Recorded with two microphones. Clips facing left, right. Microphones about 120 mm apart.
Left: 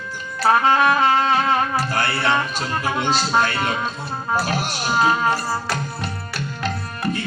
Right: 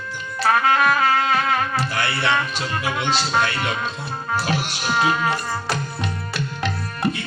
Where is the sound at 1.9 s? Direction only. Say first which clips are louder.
Left 1 dB; 45° left (ahead or behind).